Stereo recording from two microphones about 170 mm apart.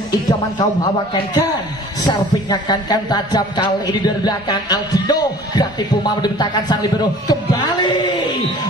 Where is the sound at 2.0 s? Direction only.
25° left (ahead or behind).